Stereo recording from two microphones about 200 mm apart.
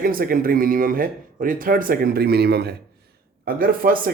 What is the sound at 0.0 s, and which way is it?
A man's voice, 45° right (ahead or behind).